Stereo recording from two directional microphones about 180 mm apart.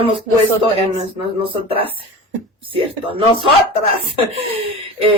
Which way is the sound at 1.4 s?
30° right (ahead or behind).